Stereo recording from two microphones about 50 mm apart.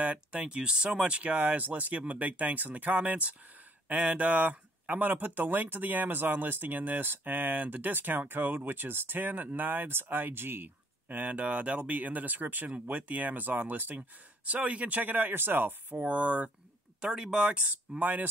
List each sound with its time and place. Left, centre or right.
0.0 s speech: right
17.0 s speech: centre; by 18.3 s right